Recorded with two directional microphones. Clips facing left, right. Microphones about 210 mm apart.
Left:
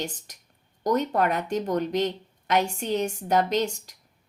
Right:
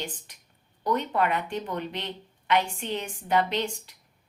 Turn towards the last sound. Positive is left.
turn(degrees=40)  # may be behind; listen again after turning